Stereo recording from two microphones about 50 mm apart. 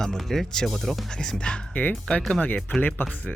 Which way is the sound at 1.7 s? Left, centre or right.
Left.